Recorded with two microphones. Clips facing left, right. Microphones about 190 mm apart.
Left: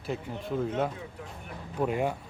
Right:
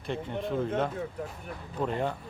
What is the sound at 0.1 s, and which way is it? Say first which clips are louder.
Speech: right 2 dB; 5° left (ahead or behind).